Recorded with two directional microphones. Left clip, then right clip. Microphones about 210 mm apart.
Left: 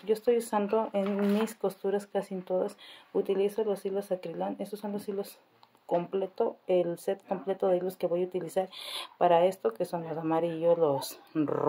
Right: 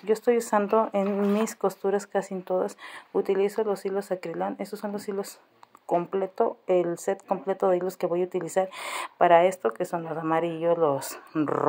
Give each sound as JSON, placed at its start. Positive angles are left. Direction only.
{"t": 0.1, "sound": "speech", "side_deg": -20}